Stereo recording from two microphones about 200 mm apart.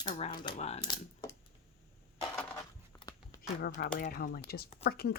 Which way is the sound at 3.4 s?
50° left (ahead or behind).